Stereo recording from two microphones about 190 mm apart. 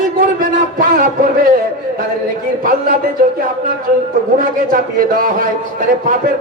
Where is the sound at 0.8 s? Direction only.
50° right (ahead or behind).